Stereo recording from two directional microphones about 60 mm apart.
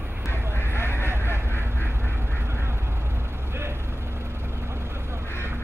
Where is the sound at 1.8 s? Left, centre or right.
Right.